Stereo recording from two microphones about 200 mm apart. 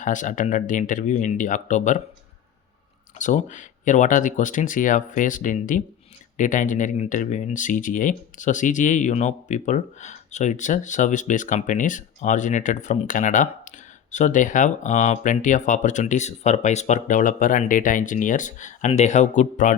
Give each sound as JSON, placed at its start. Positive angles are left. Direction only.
{"t": 0.0, "sound": "speech", "side_deg": 40}
{"t": 3.2, "sound": "speech", "side_deg": 40}